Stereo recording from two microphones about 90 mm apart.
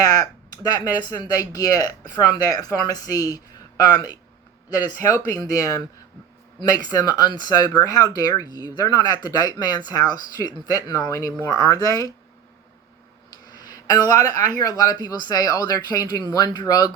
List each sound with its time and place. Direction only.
0.0 s speech: 45° left (ahead or behind)
5.3 s speech: 40° left (ahead or behind)
13.5 s speech: 45° left (ahead or behind)